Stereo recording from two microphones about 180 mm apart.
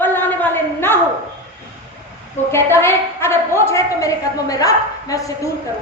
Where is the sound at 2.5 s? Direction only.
15° left (ahead or behind).